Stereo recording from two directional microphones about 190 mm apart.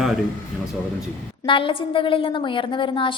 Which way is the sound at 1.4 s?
25° left (ahead or behind).